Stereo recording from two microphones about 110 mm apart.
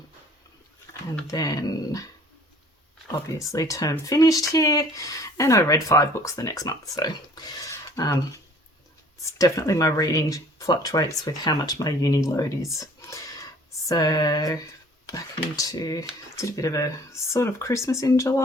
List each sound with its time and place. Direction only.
1.3 s speech: 30° left (ahead or behind)
3.1 s speech: 30° left (ahead or behind)
9.2 s speech: 30° left (ahead or behind)
13.0 s a sound: 30° left (ahead or behind)
15.0 s speech: 30° left (ahead or behind)